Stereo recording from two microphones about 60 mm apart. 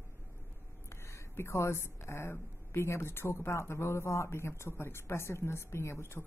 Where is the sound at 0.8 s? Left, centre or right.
Left.